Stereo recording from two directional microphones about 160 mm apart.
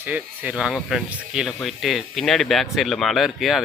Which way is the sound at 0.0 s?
10° right (ahead or behind).